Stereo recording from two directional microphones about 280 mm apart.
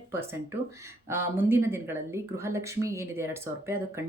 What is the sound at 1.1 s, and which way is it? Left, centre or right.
Speech, centre.